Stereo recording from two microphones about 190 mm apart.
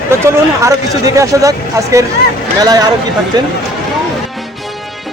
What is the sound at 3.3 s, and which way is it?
Speech, 20° right (ahead or behind).